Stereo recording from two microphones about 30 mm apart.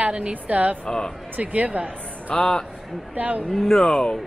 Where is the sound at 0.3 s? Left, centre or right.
Right.